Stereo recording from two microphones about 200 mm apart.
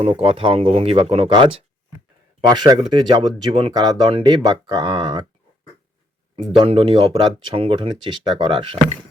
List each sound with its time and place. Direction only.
0.0 s speech: 30° right (ahead or behind)
6.6 s speech: 25° right (ahead or behind)